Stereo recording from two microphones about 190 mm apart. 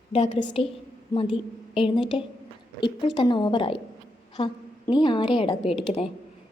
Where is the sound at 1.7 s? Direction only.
25° left (ahead or behind).